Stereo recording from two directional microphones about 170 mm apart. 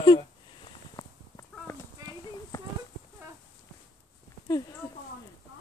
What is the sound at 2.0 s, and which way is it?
Clip-clop, 25° right (ahead or behind).